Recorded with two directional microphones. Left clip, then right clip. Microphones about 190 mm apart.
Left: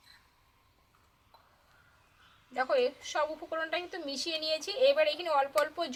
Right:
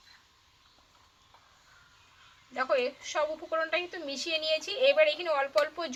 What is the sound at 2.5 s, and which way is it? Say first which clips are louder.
A woman's voice: even; 5° left (ahead or behind).